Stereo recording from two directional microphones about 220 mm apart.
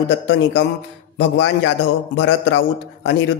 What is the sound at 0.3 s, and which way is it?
A man's voice, 55° left (ahead or behind).